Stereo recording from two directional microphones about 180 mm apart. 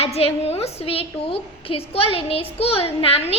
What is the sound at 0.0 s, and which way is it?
A woman's voice, 35° left (ahead or behind).